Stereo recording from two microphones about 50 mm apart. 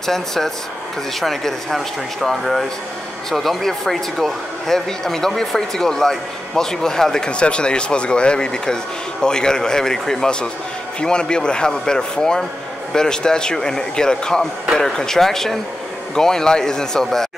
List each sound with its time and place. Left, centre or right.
0.0 s speech: centre